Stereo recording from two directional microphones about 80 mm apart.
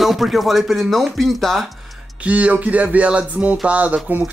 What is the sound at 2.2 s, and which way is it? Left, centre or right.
Music, centre.